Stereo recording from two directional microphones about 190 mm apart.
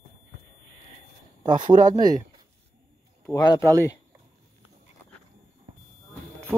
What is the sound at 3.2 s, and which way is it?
Speech, 20° left (ahead or behind).